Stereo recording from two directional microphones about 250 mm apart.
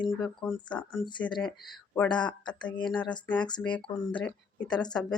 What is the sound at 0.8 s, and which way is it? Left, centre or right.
Speech, centre.